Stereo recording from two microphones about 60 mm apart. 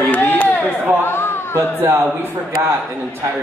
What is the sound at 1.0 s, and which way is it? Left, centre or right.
Speech, left.